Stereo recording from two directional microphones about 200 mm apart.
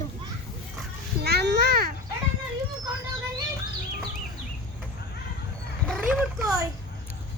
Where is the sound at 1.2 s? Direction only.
55° right (ahead or behind).